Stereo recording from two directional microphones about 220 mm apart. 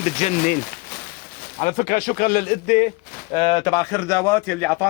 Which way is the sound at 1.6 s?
35° left (ahead or behind).